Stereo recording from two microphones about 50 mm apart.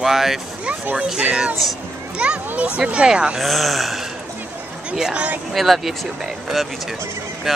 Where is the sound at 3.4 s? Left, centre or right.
Centre.